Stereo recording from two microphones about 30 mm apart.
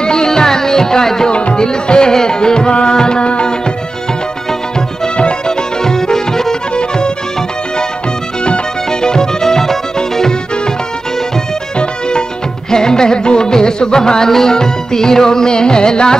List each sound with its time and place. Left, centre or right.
0.0 s music: left
1.3 s music: left
5.5 s music: left
6.7 s music: left
9.0 s music: left
11.8 s music: left